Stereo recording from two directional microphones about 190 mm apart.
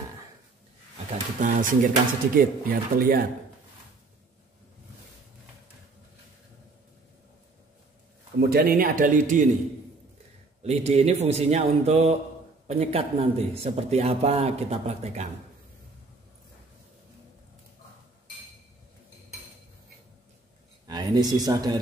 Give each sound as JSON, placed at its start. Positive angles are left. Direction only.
{"t": 1.4, "sound": "speech", "side_deg": -45}
{"t": 8.4, "sound": "speech", "side_deg": -55}
{"t": 10.6, "sound": "a man's voice", "side_deg": -35}
{"t": 20.8, "sound": "a sound", "side_deg": -20}
{"t": 21.5, "sound": "speech", "side_deg": -20}